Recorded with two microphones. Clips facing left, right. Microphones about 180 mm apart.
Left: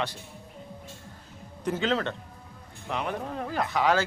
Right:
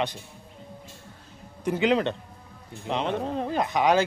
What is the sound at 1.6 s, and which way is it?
A man's voice, 15° right (ahead or behind).